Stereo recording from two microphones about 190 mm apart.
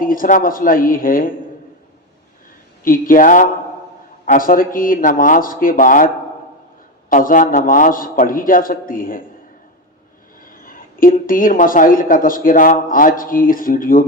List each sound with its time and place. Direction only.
0.0 s speech: 45° left (ahead or behind)
2.8 s speech: 45° left (ahead or behind)
7.1 s speech: 45° left (ahead or behind)
10.4 s speech: 45° left (ahead or behind)